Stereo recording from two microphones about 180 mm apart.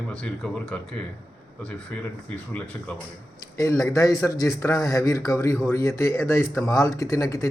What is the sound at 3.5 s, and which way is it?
Speech, 15° left (ahead or behind).